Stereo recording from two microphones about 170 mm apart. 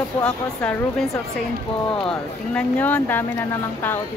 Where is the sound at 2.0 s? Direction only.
10° left (ahead or behind).